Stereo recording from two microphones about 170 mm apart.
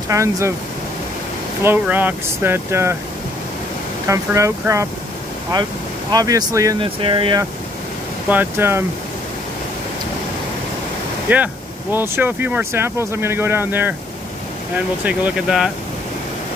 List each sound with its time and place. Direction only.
0.1 s speech: 15° right (ahead or behind)
1.6 s speech: 10° right (ahead or behind)
4.1 s speech: 15° right (ahead or behind)
6.1 s speech: 20° right (ahead or behind)
6.8 s speech: 30° right (ahead or behind)
8.3 s speech: 10° right (ahead or behind)
11.2 s speech: 10° right (ahead or behind)
15.0 s speech: 5° right (ahead or behind)